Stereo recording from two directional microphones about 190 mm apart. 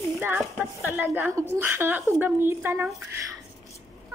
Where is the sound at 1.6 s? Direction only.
10° right (ahead or behind).